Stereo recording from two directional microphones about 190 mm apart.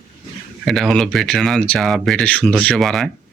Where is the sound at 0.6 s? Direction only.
Centre (ahead or behind).